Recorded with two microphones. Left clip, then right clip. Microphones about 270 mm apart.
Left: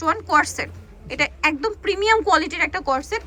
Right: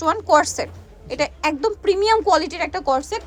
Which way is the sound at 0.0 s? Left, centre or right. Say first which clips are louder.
Right 2 dB; centre.